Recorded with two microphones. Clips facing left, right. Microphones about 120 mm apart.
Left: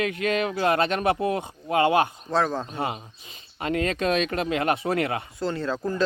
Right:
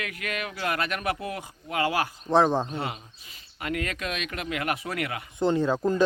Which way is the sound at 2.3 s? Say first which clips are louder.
Right 3 dB; 20° right (ahead or behind).